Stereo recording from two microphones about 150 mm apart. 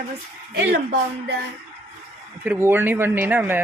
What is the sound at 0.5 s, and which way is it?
Speech, 90° right.